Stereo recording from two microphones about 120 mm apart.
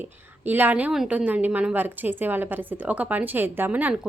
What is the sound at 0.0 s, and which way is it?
A woman's voice, 15° right (ahead or behind).